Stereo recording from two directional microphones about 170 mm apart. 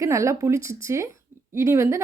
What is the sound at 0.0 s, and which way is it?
A woman's voice, 15° right (ahead or behind).